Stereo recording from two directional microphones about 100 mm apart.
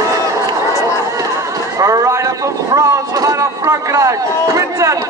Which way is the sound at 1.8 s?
30° right (ahead or behind).